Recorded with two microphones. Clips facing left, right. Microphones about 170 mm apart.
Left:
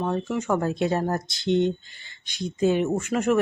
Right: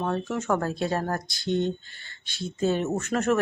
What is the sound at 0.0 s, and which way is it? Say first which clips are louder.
A woman's voice: left 2 dB; 10° left (ahead or behind).